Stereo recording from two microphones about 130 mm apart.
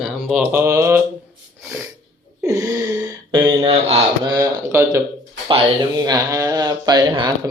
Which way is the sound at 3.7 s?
50° right (ahead or behind).